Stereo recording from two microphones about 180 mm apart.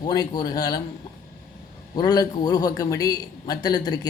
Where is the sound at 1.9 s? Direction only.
20° left (ahead or behind).